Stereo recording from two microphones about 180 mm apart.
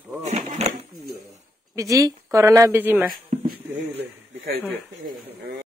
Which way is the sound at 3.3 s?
40° right (ahead or behind).